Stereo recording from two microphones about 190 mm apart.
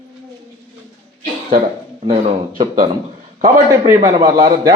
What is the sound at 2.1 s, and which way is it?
Speech, 35° right (ahead or behind).